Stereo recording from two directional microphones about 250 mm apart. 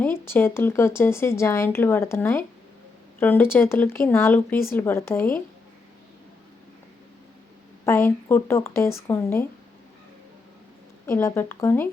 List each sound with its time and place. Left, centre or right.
0.0 s speech: centre
7.9 s speech: centre
11.0 s speech: centre